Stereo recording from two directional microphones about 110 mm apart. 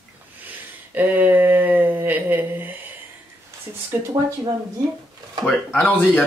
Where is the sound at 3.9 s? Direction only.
25° right (ahead or behind).